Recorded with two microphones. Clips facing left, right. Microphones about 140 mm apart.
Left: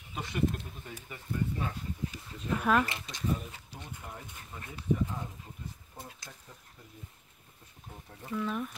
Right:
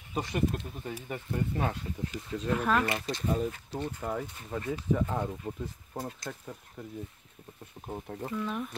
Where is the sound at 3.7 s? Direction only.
80° right.